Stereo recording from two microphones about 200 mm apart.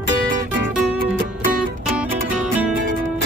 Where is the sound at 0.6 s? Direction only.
50° right (ahead or behind).